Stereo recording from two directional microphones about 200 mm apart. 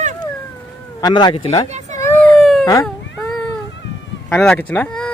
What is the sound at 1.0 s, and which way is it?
Speech, 20° left (ahead or behind).